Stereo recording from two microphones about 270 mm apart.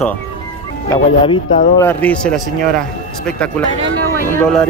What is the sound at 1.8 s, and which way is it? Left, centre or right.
Speech, centre.